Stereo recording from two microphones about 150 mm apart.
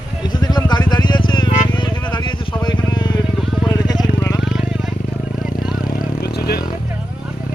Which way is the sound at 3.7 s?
25° left (ahead or behind).